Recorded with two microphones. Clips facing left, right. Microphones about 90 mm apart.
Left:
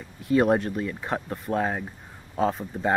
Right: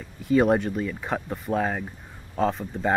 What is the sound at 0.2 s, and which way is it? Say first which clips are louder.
Speech: right 1 dB; centre (ahead or behind).